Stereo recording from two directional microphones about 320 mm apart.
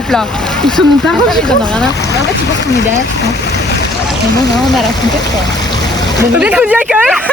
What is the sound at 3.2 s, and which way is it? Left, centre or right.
Speech, left.